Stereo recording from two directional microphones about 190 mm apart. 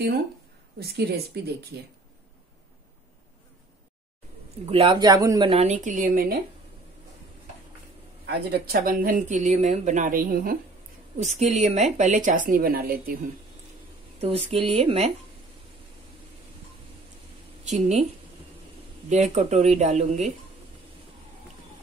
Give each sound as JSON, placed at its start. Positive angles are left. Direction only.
{"t": 0.7, "sound": "speech", "side_deg": -55}
{"t": 4.6, "sound": "speech", "side_deg": -30}
{"t": 5.5, "sound": "speech", "side_deg": -35}
{"t": 8.3, "sound": "speech", "side_deg": -55}
{"t": 11.1, "sound": "a woman's voice", "side_deg": -35}
{"t": 14.2, "sound": "a woman's voice", "side_deg": -30}
{"t": 17.6, "sound": "a woman's voice", "side_deg": -35}
{"t": 19.0, "sound": "a woman's voice", "side_deg": -35}